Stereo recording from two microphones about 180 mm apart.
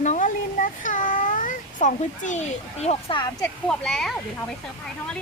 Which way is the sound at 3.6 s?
Centre (ahead or behind).